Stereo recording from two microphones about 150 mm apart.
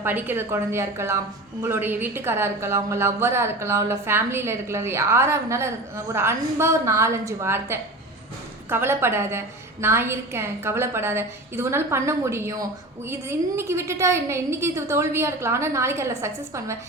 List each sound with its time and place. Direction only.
0.0 s a woman's voice: 15° right (ahead or behind)